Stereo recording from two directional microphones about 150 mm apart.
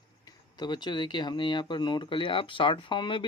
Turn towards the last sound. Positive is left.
turn(degrees=35)  # may be behind; listen again after turning